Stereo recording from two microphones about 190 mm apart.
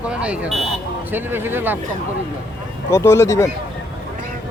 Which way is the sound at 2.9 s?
15° left (ahead or behind).